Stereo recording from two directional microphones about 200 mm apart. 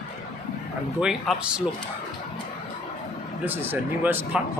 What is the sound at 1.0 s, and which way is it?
Speech, centre (ahead or behind).